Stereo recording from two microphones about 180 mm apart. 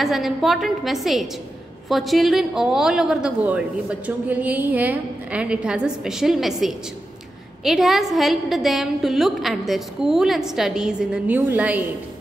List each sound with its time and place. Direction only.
0.0 s a woman's voice: centre (ahead or behind)